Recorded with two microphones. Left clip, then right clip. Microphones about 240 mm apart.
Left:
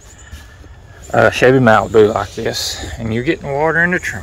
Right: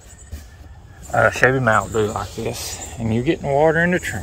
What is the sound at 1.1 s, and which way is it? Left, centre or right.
Speech, left.